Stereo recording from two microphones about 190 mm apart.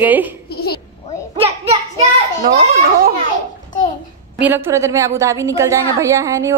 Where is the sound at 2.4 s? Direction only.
50° right (ahead or behind).